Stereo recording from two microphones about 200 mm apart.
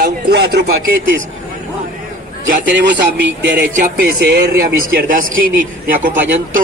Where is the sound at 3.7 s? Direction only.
50° right (ahead or behind).